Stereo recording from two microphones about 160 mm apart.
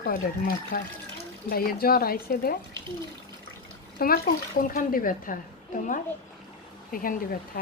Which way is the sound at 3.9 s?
65° left (ahead or behind).